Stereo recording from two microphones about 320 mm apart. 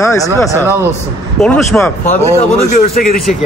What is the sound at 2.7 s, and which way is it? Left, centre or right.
Speech, left.